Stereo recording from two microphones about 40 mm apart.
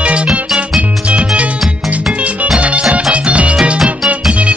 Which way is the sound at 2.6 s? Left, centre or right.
Right.